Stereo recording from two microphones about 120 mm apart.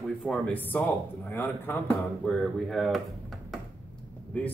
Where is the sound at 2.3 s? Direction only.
Centre (ahead or behind).